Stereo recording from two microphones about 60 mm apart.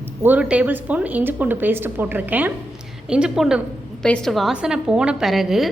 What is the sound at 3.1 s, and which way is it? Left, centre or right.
Speech, centre.